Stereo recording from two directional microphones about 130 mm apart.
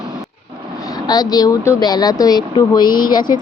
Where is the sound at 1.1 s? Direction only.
30° left (ahead or behind).